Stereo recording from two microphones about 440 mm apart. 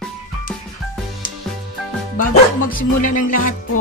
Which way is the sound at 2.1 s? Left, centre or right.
Centre.